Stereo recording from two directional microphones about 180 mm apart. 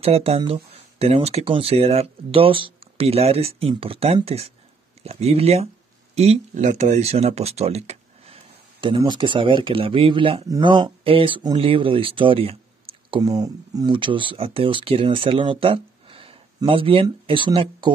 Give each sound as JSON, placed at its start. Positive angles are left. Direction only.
{"t": 0.0, "sound": "speech", "side_deg": -35}